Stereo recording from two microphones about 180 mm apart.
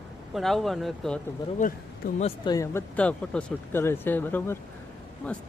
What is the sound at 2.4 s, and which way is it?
Speech, 20° left (ahead or behind).